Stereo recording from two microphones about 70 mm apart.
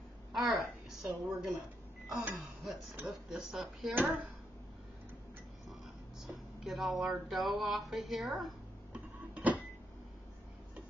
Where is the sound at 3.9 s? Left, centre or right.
Right.